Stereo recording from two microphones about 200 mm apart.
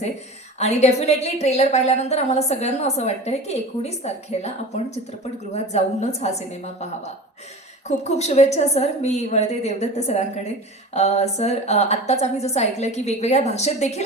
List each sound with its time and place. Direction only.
0.6 s a woman's voice: 35° left (ahead or behind)
7.9 s a woman's voice: 35° left (ahead or behind)